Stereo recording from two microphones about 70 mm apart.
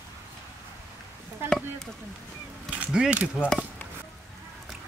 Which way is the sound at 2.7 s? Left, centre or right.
Centre.